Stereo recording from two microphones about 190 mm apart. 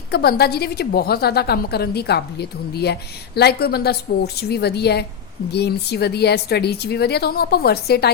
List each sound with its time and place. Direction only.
0.1 s a woman's voice: 55° left (ahead or behind)